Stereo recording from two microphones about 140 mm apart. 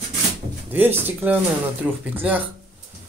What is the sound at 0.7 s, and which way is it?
Speech, 15° right (ahead or behind).